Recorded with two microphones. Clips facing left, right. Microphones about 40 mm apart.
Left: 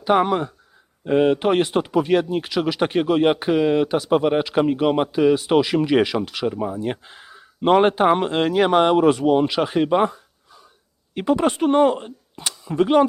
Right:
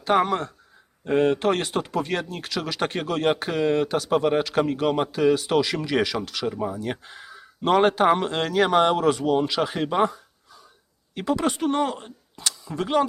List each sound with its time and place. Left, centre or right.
0.0 s speech: centre